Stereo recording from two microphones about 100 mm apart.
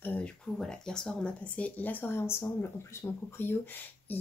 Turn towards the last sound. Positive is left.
turn(degrees=20)  # may be behind; listen again after turning